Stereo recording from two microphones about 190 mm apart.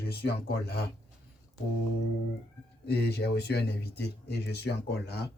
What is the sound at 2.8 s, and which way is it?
Speech, 60° left (ahead or behind).